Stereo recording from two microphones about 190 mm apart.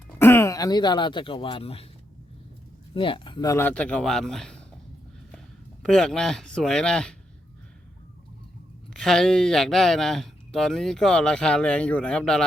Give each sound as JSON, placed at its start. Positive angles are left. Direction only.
{"t": 0.2, "sound": "speech", "side_deg": 15}
{"t": 2.9, "sound": "speech", "side_deg": 25}
{"t": 5.8, "sound": "speech", "side_deg": 5}
{"t": 8.9, "sound": "speech", "side_deg": 0}